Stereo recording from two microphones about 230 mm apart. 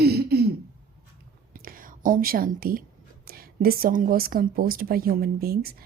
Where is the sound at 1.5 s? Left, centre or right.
Right.